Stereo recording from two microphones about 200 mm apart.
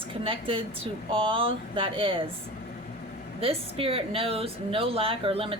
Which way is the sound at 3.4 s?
30° right (ahead or behind).